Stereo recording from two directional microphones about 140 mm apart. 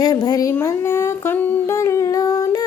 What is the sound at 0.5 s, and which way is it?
Humming, 20° left (ahead or behind).